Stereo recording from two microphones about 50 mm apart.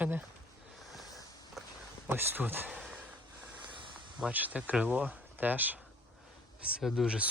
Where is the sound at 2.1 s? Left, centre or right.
Right.